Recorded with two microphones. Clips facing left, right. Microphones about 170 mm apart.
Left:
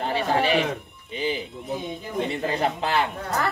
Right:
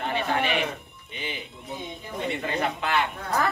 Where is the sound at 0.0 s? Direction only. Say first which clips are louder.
Left 3 dB; 35° left (ahead or behind).